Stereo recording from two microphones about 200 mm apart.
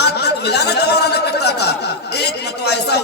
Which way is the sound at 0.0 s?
55° left (ahead or behind).